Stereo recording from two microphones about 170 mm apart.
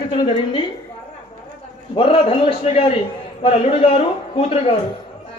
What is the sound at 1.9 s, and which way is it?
A man's voice, 30° left (ahead or behind).